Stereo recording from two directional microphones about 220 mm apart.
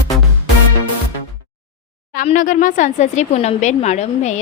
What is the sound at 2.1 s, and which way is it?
A woman's voice, 35° left (ahead or behind).